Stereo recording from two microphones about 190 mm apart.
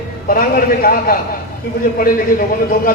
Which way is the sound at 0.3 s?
50° left (ahead or behind).